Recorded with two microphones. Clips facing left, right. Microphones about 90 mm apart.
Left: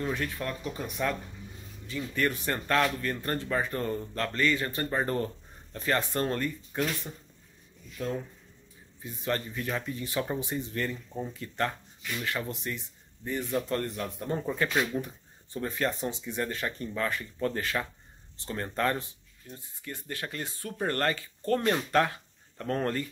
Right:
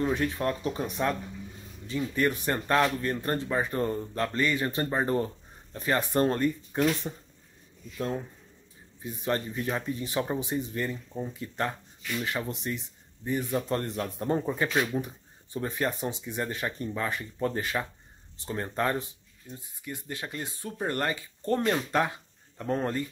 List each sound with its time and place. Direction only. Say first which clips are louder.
0.0 s speech: right 5 dB; 20° right (ahead or behind)
9.0 s speech: right 2 dB; 20° right (ahead or behind)
14.4 s speech: right 1 dB; 15° right (ahead or behind)